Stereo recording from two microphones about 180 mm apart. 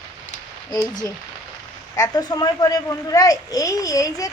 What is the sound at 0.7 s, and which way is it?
A child's voice, 20° left (ahead or behind).